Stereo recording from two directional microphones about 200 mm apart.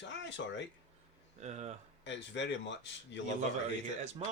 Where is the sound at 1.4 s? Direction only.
35° right (ahead or behind).